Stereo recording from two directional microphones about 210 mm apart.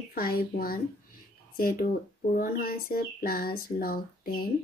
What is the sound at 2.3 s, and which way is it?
Speech, 45° left (ahead or behind).